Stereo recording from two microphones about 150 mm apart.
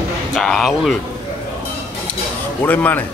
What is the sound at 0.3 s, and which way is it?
Speech, 5° left (ahead or behind).